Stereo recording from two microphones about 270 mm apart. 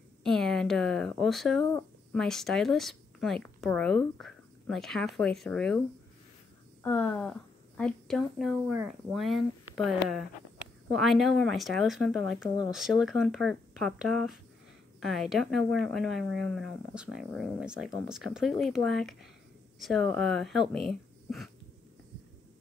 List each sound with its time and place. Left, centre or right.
0.2 s a woman's voice: centre
6.8 s a woman's voice: centre